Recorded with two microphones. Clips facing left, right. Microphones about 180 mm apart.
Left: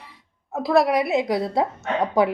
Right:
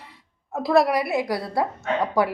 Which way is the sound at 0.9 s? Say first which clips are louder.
Left 3 dB; 20° left (ahead or behind).